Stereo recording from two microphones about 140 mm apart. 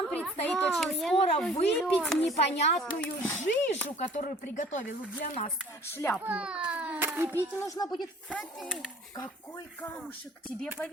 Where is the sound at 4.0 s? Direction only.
55° left (ahead or behind).